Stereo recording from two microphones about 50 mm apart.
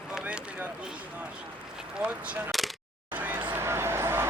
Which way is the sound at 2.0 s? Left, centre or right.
Right.